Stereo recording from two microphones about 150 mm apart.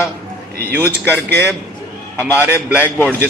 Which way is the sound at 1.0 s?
15° left (ahead or behind).